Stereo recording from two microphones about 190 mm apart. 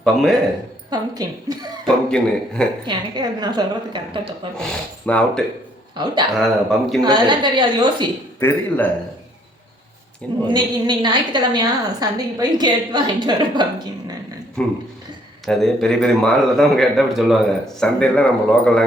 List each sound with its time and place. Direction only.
0.0 s a man's voice: centre (ahead or behind)
0.9 s a woman's voice: 20° right (ahead or behind)
1.8 s a man's voice: 5° left (ahead or behind)
2.8 s a woman's voice: 25° right (ahead or behind)
5.0 s a man's voice: 5° left (ahead or behind)
7.0 s a woman's voice: 25° right (ahead or behind)
8.4 s a man's voice: 10° left (ahead or behind)
10.4 s a woman's voice: 25° right (ahead or behind)
14.6 s a man's voice: 5° left (ahead or behind)